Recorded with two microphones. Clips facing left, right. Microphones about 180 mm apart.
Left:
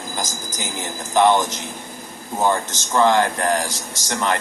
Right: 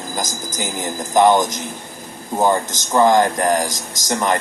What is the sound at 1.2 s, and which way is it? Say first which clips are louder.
Speech: right 3 dB; 15° right (ahead or behind).